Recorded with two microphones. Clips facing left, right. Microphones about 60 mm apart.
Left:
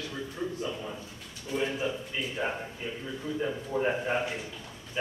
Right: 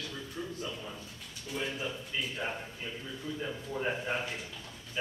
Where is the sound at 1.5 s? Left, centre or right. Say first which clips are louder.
Left 6 dB; centre.